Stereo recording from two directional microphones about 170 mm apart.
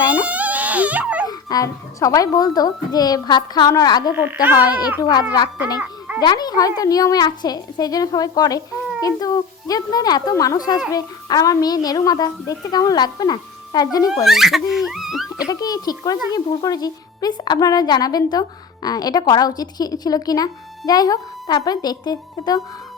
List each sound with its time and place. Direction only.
0.3 s a sound: 10° right (ahead or behind)
1.3 s speech: 20° left (ahead or behind)
4.1 s speech: 10° right (ahead or behind)
4.5 s speech: 25° left (ahead or behind)
14.3 s speech: centre (ahead or behind)
15.4 s speech: 20° left (ahead or behind)